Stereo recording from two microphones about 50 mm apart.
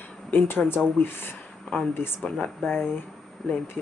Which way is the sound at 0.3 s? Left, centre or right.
Left.